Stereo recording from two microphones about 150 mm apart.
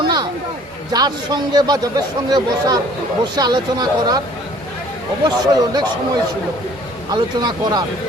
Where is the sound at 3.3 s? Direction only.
25° right (ahead or behind).